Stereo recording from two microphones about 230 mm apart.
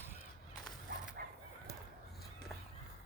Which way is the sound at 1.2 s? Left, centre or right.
Right.